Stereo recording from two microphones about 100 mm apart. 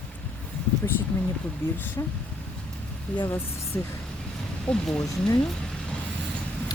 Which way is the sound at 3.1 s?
15° left (ahead or behind).